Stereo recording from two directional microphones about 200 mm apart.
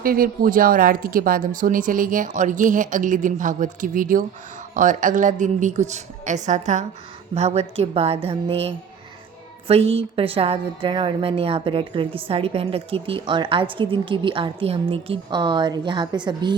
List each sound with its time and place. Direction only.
0.0 s a woman's voice: 45° right (ahead or behind); by 16.6 s 20° right (ahead or behind)